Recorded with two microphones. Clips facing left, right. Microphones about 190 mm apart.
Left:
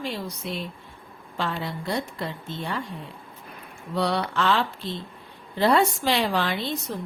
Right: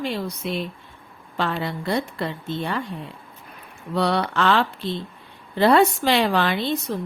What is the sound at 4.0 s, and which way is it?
A woman's voice, 65° right (ahead or behind).